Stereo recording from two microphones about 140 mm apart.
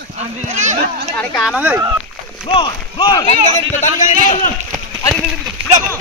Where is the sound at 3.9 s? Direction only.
75° left (ahead or behind).